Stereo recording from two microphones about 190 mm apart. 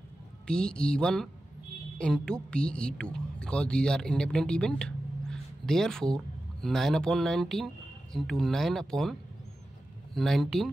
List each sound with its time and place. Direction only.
0.5 s a woman's voice: 5° left (ahead or behind)
10.1 s speech: centre (ahead or behind)